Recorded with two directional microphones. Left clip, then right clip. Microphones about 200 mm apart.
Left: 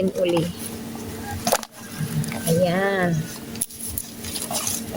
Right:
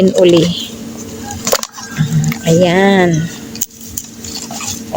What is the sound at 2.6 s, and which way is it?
Speech, 40° right (ahead or behind).